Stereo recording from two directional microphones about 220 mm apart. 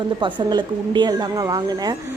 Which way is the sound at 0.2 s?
20° right (ahead or behind).